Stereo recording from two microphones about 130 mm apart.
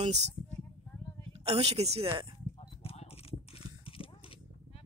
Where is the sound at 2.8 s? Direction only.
50° left (ahead or behind).